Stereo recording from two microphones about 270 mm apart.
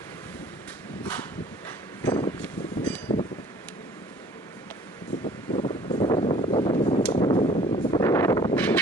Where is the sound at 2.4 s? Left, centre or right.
Centre.